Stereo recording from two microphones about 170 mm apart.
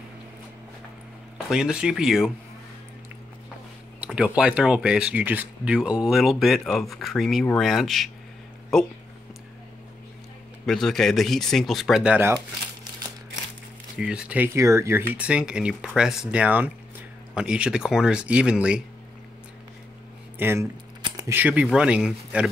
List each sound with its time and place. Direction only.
1.5 s speech: 5° right (ahead or behind)
4.0 s speech: 5° right (ahead or behind)
10.6 s speech: centre (ahead or behind)
13.9 s speech: 5° right (ahead or behind)
20.3 s speech: 10° right (ahead or behind)
21.0 s a sound: 20° right (ahead or behind)
21.4 s speech: 10° right (ahead or behind)